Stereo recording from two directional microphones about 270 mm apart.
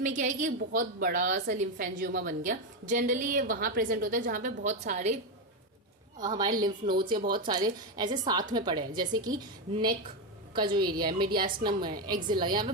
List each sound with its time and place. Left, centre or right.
0.0 s a woman's voice: right
6.7 s speech: right
7.3 s a woman's voice: centre
11.3 s speech: right
11.6 s a woman's voice: centre